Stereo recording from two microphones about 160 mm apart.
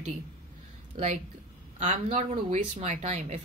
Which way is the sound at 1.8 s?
45° right (ahead or behind).